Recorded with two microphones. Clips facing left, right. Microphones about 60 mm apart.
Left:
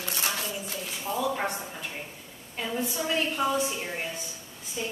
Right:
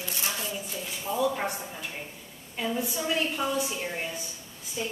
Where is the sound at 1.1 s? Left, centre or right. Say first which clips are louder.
Right 1 dB; centre.